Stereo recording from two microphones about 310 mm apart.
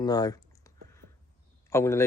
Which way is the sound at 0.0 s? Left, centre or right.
Centre.